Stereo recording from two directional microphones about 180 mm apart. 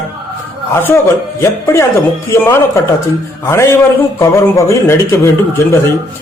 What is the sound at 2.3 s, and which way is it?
Speech, 15° left (ahead or behind).